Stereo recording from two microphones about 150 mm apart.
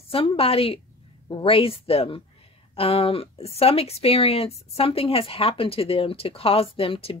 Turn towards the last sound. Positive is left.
turn(degrees=40)  # may be behind; listen again after turning